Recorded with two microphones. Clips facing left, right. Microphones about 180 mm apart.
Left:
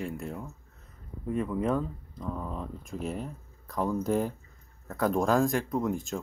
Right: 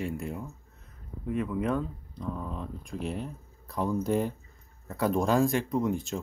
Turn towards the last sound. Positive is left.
turn(degrees=0)  # may be behind; listen again after turning